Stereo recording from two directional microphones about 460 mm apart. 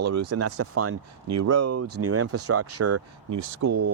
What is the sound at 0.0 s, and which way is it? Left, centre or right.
Speech, right.